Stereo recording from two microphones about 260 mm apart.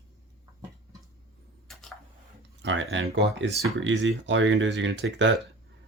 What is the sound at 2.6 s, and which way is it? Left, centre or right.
Speech, right.